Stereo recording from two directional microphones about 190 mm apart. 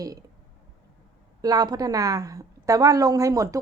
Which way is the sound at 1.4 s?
20° right (ahead or behind).